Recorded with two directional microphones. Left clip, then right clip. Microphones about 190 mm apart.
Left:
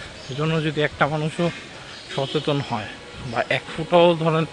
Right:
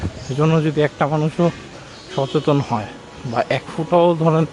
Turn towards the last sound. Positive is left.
turn(degrees=-10)  # may be behind; listen again after turning